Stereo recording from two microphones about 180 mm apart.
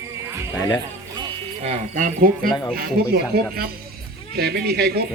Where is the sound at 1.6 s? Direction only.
45° right (ahead or behind).